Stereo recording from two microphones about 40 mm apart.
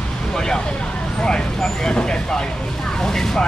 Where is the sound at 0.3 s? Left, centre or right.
Centre.